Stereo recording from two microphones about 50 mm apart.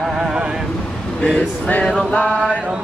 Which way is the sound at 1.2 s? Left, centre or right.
Left.